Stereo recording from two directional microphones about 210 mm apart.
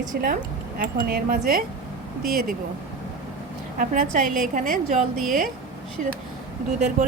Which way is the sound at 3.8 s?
40° right (ahead or behind).